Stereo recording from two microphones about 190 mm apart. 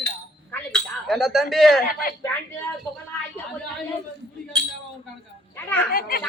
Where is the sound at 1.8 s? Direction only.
50° left (ahead or behind).